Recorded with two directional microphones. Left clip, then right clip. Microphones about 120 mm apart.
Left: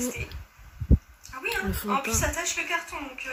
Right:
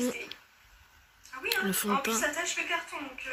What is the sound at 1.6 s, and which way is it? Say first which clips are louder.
Speech: left 1 dB; 10° right (ahead or behind).